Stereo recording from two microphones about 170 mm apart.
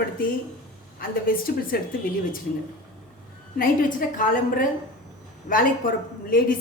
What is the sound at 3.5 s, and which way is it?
A woman's voice, 55° left (ahead or behind).